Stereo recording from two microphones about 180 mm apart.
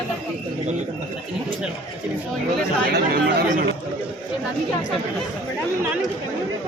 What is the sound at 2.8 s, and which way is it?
Speech, 60° right (ahead or behind).